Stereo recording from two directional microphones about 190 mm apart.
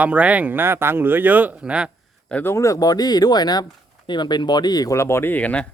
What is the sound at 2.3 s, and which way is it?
Speech, 10° left (ahead or behind).